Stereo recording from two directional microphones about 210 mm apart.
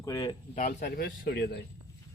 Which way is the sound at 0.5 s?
40° left (ahead or behind).